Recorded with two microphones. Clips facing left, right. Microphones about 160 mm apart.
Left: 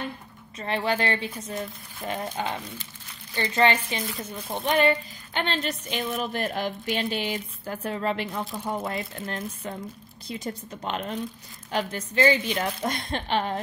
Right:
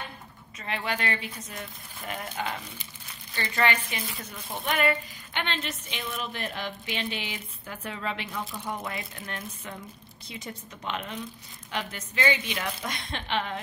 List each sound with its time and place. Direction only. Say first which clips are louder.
0.6 s a woman's voice: left 6 dB; 35° left (ahead or behind)
8.3 s a woman's voice: left 4 dB; 25° left (ahead or behind)